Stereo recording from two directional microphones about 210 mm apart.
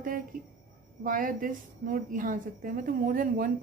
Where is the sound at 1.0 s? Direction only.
40° right (ahead or behind).